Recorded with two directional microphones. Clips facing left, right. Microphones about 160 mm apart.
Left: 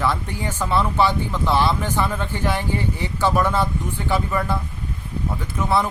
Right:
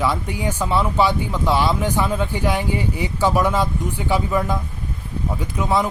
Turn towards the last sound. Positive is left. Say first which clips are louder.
# right 1 dB
turn(degrees=-15)  # may be behind; listen again after turning